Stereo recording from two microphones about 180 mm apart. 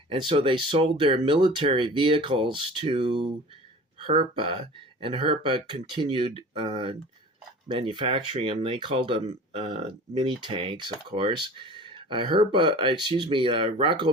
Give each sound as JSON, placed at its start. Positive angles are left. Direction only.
{"t": 0.1, "sound": "speech", "side_deg": -30}